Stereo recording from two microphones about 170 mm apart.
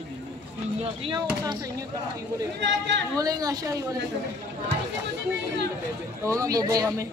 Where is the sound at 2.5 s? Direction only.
90° right.